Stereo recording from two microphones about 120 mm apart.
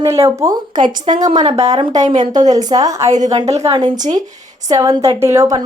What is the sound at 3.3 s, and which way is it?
Speech, 55° right (ahead or behind).